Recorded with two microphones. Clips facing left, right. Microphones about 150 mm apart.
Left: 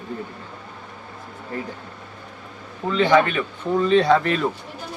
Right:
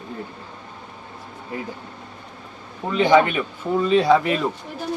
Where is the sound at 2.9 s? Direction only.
15° right (ahead or behind).